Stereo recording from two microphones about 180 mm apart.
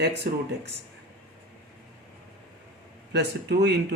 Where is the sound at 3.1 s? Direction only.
65° right (ahead or behind).